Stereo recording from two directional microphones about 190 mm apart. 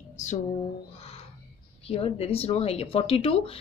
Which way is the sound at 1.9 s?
30° left (ahead or behind).